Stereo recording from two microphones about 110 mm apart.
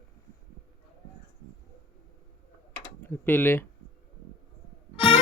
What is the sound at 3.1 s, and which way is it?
Speech, 20° left (ahead or behind).